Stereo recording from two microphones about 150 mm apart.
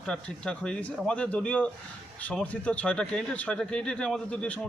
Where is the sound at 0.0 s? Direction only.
5° left (ahead or behind).